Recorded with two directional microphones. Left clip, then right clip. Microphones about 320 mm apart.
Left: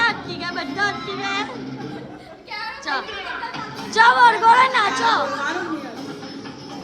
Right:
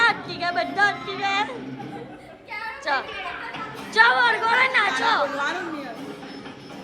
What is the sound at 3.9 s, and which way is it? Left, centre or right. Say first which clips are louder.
A woman's voice: left 4 dB; centre.